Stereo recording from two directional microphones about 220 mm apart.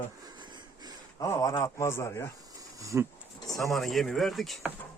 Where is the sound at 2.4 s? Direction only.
15° right (ahead or behind).